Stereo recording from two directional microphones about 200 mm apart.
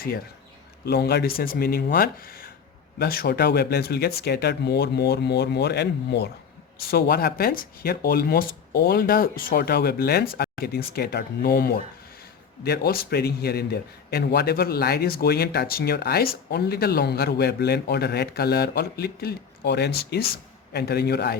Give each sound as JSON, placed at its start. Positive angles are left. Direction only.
{"t": 0.9, "sound": "a man's voice", "side_deg": 55}